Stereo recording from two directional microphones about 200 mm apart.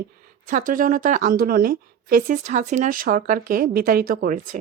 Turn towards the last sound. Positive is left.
turn(degrees=-45)  # may be behind; listen again after turning